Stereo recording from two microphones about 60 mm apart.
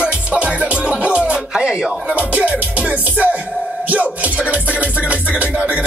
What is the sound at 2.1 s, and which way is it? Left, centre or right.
Music, right.